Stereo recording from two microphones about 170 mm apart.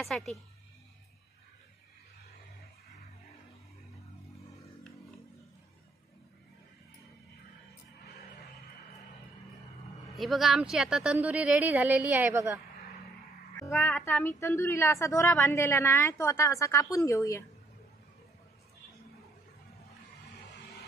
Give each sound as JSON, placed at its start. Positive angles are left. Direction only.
{"t": 0.0, "sound": "speech", "side_deg": 0}
{"t": 10.1, "sound": "speech", "side_deg": 0}
{"t": 13.6, "sound": "a sound", "side_deg": 15}
{"t": 14.2, "sound": "a woman's voice", "side_deg": 15}